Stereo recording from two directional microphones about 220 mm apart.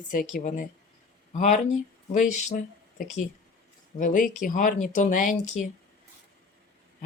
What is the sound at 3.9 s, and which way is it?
Speech, 35° left (ahead or behind).